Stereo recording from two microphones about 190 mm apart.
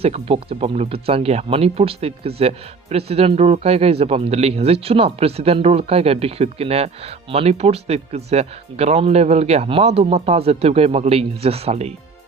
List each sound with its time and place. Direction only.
0.0 s speech: 30° right (ahead or behind)